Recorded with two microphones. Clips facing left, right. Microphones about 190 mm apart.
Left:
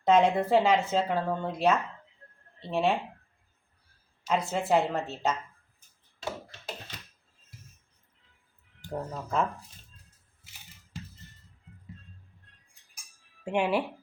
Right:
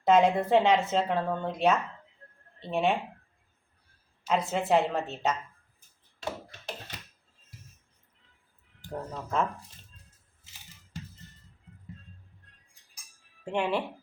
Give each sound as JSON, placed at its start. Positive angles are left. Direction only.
{"t": 0.0, "sound": "speech", "side_deg": 0}
{"t": 4.3, "sound": "speech", "side_deg": 0}
{"t": 8.9, "sound": "speech", "side_deg": 5}
{"t": 13.4, "sound": "speech", "side_deg": 10}